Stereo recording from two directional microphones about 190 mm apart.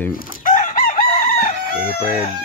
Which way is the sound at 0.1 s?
45° left (ahead or behind).